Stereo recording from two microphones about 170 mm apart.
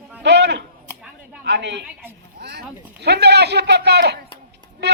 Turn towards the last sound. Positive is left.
turn(degrees=-80)